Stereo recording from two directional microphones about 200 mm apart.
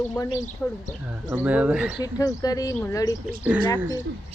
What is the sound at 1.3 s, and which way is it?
Speech, 5° right (ahead or behind).